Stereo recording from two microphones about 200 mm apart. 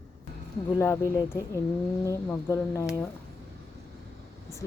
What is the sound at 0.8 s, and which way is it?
A woman's voice, 15° left (ahead or behind).